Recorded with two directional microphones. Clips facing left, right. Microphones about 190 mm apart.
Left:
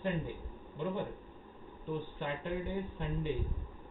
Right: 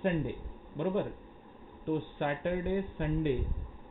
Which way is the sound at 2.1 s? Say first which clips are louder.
Right 5 dB; 65° right (ahead or behind).